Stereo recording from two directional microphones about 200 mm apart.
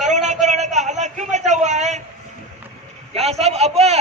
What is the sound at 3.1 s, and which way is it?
Speech, 30° right (ahead or behind).